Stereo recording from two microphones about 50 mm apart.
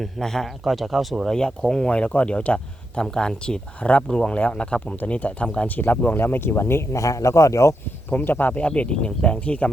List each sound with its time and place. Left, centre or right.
0.0 s speech: centre
1.2 s speech: centre
3.8 s speech: left
5.6 s speech: left
6.9 s speech: left
8.1 s speech: left